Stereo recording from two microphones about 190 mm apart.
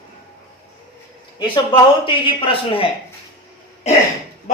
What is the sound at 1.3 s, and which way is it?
Speech, 25° left (ahead or behind).